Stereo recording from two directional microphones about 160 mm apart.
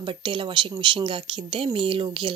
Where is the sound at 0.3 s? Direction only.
30° right (ahead or behind).